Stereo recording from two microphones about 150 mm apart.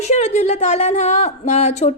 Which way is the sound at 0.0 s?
45° left (ahead or behind).